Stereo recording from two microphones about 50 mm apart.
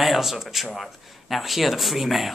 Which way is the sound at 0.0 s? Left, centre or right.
Centre.